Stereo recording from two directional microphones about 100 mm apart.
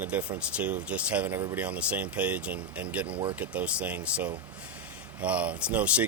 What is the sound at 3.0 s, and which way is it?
Speech, 65° right (ahead or behind).